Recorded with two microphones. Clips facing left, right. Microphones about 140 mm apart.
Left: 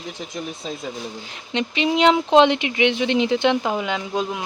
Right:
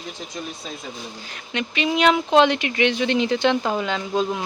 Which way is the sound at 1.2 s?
20° left (ahead or behind).